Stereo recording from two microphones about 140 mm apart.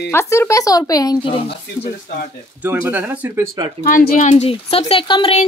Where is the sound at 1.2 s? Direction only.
40° left (ahead or behind).